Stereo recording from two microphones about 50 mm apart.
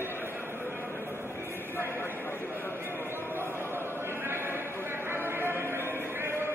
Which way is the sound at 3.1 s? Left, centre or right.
Right.